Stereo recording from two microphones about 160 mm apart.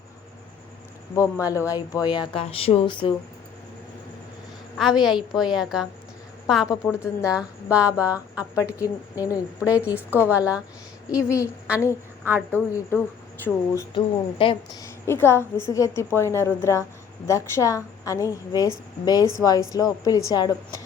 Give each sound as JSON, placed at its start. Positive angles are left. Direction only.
{"t": 1.1, "sound": "speech", "side_deg": 20}
{"t": 5.5, "sound": "a woman's voice", "side_deg": -5}
{"t": 7.0, "sound": "a woman's voice", "side_deg": 20}
{"t": 7.3, "sound": "speech", "side_deg": -10}
{"t": 8.5, "sound": "speech", "side_deg": 20}
{"t": 9.6, "sound": "speech", "side_deg": -10}
{"t": 11.1, "sound": "speech", "side_deg": 20}
{"t": 12.5, "sound": "a woman's voice", "side_deg": 15}
{"t": 13.9, "sound": "a woman's voice", "side_deg": 35}
{"t": 14.8, "sound": "a woman's voice", "side_deg": 15}